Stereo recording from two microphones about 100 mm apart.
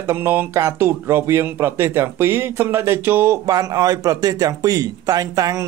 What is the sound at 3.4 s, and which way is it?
A man's voice, 40° right (ahead or behind).